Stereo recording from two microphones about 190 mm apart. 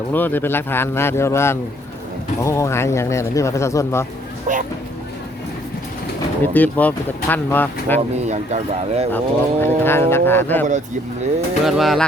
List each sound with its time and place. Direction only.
0.1 s speech: 10° left (ahead or behind)
4.5 s a sound: 45° right (ahead or behind)
6.4 s speech: 10° left (ahead or behind)
8.3 s speech: 35° right (ahead or behind)
9.1 s speech: 10° left (ahead or behind)
11.6 s speech: centre (ahead or behind)